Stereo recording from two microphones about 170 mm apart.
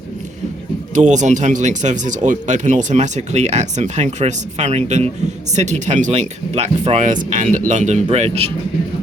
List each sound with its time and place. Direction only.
0.9 s speech: 45° right (ahead or behind)